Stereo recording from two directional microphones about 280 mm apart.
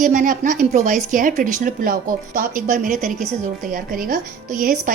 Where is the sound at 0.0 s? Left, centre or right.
Right.